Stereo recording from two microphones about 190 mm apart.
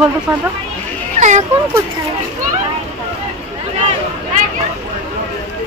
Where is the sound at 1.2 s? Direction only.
40° right (ahead or behind).